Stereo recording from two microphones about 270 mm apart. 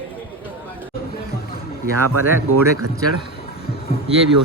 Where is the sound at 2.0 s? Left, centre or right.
Right.